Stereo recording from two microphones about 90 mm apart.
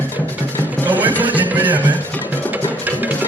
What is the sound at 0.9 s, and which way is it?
Music, 20° right (ahead or behind).